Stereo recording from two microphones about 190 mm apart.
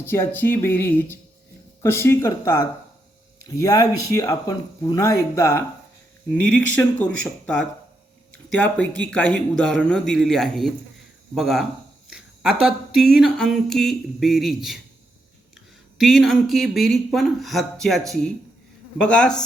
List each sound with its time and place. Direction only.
0.0 s speech: 10° left (ahead or behind)
16.0 s speech: centre (ahead or behind)